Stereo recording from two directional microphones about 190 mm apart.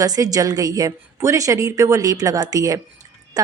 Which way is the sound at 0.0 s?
20° right (ahead or behind).